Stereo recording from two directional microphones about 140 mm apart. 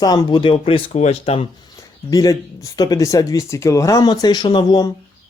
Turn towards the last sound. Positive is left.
turn(degrees=30)  # may be behind; listen again after turning